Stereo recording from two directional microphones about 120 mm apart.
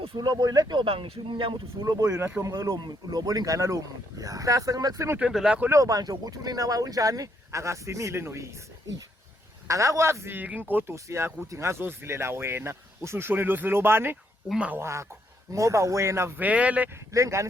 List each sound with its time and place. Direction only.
0.2 s speech: 35° right (ahead or behind)
1.7 s speech: 30° right (ahead or behind)
5.1 s speech: 5° right (ahead or behind)
5.6 s speech: 25° right (ahead or behind)
9.6 s speech: 25° right (ahead or behind); by 14.8 s 10° right (ahead or behind)
14.8 s speech: 25° right (ahead or behind)
17.1 s speech: 25° right (ahead or behind)